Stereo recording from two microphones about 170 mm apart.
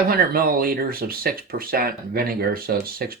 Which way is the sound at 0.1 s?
60° right (ahead or behind).